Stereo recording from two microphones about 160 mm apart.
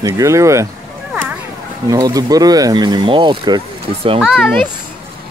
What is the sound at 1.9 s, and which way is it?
Speech, 25° right (ahead or behind).